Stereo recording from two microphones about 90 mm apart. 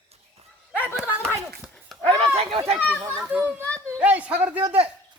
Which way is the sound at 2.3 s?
90° right.